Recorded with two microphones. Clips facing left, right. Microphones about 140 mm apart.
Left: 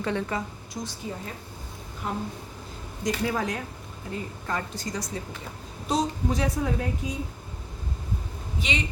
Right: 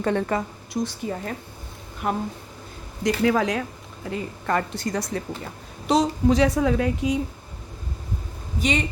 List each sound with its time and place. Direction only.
0.0 s a woman's voice: 55° right (ahead or behind)
3.0 s a woman's voice: 80° right
4.1 s a woman's voice: 70° right (ahead or behind)
5.9 s a woman's voice: 85° right
8.5 s a woman's voice: 45° right (ahead or behind)